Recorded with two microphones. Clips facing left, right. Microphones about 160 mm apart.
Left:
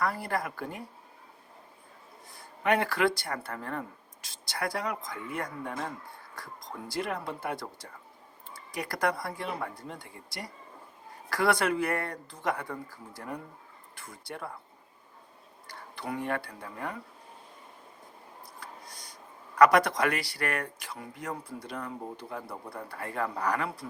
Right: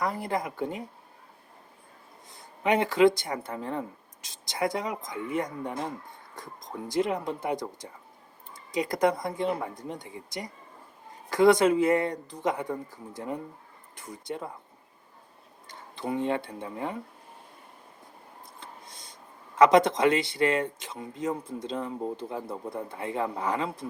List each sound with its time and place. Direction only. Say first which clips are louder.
0.0 s speech: right 1 dB; 20° right (ahead or behind)
2.4 s speech: right 2 dB; 20° right (ahead or behind)
15.6 s speech: right 4 dB; 20° right (ahead or behind)
18.6 s a sound: even; 25° right (ahead or behind)
19.5 s speech: right 2 dB; 20° right (ahead or behind)